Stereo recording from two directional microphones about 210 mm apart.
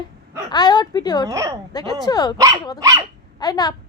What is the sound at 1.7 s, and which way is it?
Speech, 15° left (ahead or behind).